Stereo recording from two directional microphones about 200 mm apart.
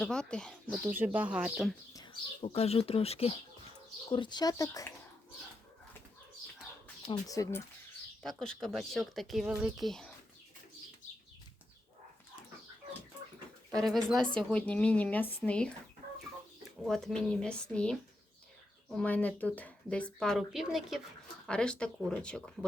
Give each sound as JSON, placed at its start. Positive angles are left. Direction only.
{"t": 0.0, "sound": "speech", "side_deg": 5}
{"t": 0.9, "sound": "speech", "side_deg": -10}
{"t": 2.4, "sound": "speech", "side_deg": 30}
{"t": 7.1, "sound": "speech", "side_deg": 15}
{"t": 8.2, "sound": "speech", "side_deg": 0}
{"t": 13.7, "sound": "speech", "side_deg": 0}
{"t": 16.8, "sound": "speech", "side_deg": 5}